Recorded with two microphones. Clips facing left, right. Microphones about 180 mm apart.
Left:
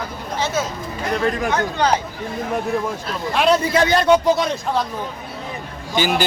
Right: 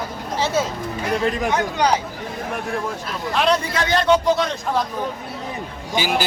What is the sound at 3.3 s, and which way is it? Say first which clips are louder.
Speech: left 3 dB; 5° left (ahead or behind).